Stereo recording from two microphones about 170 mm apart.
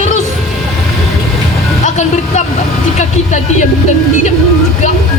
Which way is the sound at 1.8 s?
45° left (ahead or behind).